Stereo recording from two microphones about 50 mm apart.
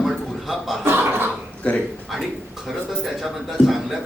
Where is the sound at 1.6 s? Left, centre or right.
Left.